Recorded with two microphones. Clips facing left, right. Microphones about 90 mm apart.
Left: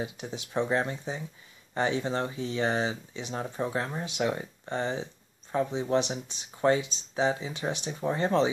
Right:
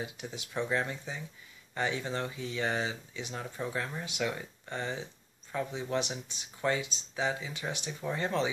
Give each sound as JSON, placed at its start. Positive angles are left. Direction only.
{"t": 0.0, "sound": "speech", "side_deg": 25}